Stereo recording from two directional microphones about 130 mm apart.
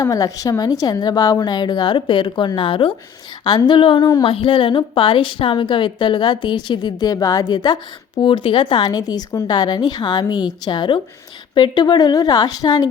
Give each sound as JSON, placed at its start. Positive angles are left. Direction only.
{"t": 0.0, "sound": "a woman's voice", "side_deg": 25}